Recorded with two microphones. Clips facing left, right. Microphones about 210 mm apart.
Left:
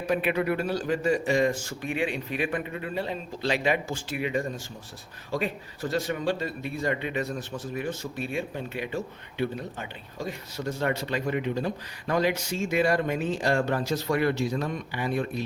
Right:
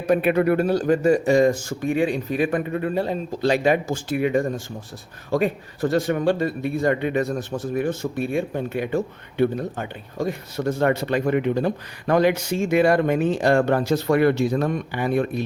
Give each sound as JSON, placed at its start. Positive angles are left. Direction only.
{"t": 0.1, "sound": "a man's voice", "side_deg": -50}